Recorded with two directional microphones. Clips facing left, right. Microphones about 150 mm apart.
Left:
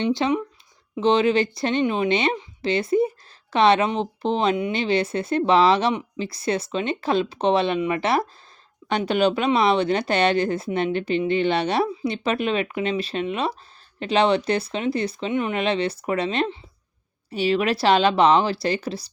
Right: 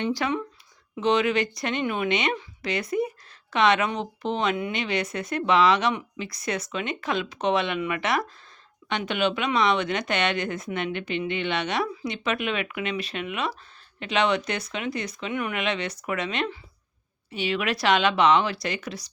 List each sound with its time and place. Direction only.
0.1 s speech: 20° left (ahead or behind)